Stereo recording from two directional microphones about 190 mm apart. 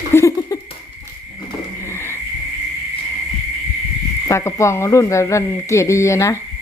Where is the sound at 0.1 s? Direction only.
15° left (ahead or behind).